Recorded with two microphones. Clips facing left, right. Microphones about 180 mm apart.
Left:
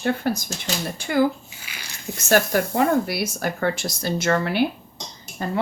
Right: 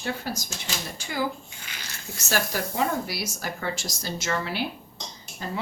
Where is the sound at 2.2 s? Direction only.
55° left (ahead or behind).